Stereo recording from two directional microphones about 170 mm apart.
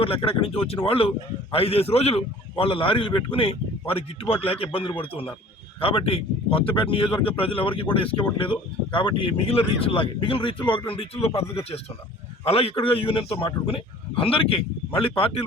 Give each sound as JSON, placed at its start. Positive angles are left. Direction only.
{"t": 0.0, "sound": "speech", "side_deg": 30}
{"t": 12.5, "sound": "speech", "side_deg": 35}